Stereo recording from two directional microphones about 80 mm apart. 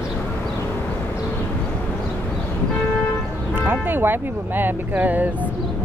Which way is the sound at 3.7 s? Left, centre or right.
Right.